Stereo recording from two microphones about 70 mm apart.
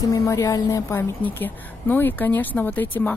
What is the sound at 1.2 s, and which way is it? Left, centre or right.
A woman's voice, left.